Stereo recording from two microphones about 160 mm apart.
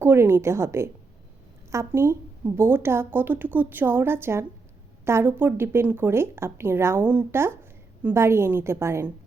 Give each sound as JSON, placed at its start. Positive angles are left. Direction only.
{"t": 0.0, "sound": "speech", "side_deg": -15}